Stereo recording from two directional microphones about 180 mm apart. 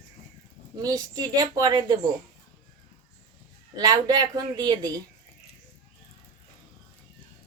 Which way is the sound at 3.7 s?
20° right (ahead or behind).